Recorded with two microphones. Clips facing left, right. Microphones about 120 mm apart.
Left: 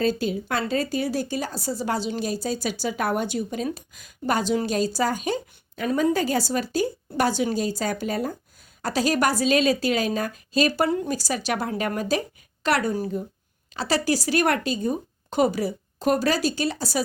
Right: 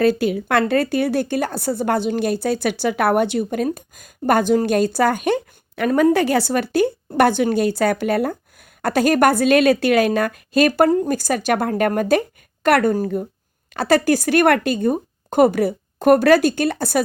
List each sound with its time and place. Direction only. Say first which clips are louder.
0.0 s a woman's voice: right 6 dB; 70° right (ahead or behind)